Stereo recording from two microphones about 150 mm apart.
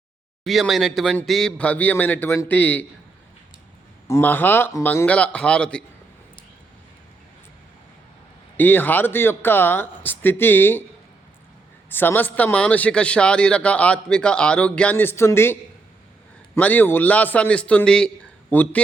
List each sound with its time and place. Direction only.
0.4 s a man's voice: centre (ahead or behind)
4.1 s a man's voice: 15° left (ahead or behind)
8.5 s a man's voice: 10° left (ahead or behind)
11.9 s a man's voice: 15° left (ahead or behind)
16.6 s a man's voice: 10° left (ahead or behind)